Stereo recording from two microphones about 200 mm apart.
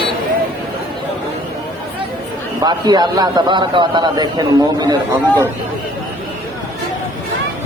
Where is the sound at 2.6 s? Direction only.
20° right (ahead or behind).